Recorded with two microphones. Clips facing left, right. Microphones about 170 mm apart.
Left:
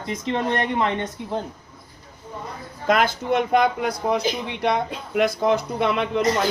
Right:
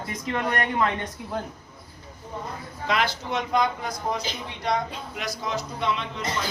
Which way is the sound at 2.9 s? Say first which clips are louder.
Left 6 dB; 50° left (ahead or behind).